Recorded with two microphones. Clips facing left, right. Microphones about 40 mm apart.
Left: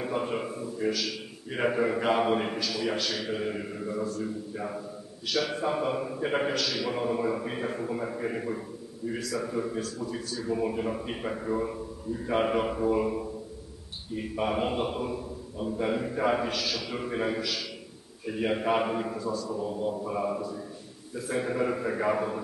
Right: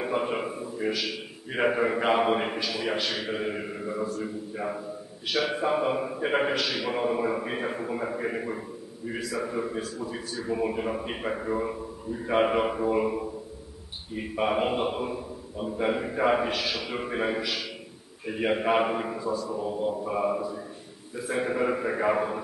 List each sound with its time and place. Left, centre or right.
0.0 s a man's voice: right